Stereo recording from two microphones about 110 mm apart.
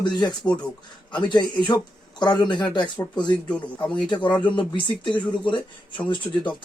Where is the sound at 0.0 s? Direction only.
40° left (ahead or behind).